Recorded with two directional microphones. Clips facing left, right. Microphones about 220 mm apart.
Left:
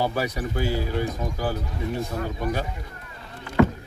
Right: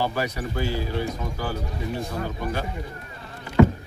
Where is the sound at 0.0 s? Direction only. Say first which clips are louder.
Left 1 dB; 10° left (ahead or behind).